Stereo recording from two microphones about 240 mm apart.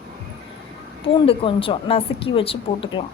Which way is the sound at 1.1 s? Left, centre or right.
Left.